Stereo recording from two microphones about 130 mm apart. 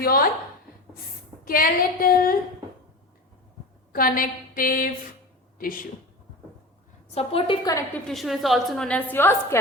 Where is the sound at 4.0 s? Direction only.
90° left.